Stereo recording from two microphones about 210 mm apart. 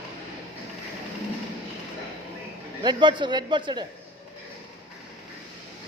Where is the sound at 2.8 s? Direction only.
20° right (ahead or behind).